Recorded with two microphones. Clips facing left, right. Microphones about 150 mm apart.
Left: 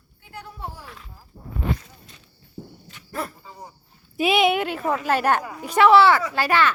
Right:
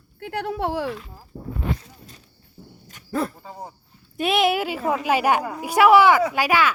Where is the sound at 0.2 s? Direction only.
70° right (ahead or behind); by 0.9 s 90° right.